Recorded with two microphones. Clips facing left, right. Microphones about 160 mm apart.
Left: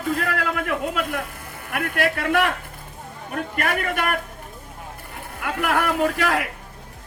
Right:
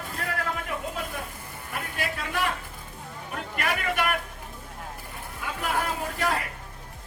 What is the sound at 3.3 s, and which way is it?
Speech, 50° left (ahead or behind).